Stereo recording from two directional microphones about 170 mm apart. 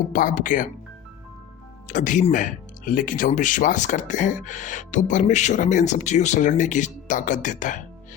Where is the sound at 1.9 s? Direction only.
50° left (ahead or behind).